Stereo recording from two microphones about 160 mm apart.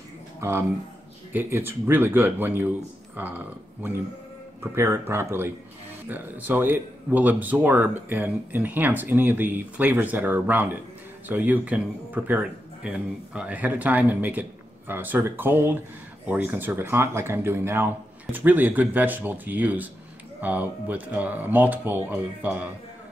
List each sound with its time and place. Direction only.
0.4 s speech: 15° right (ahead or behind)